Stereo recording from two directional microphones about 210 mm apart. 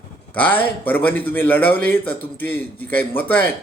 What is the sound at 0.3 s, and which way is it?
A man's voice, 5° left (ahead or behind).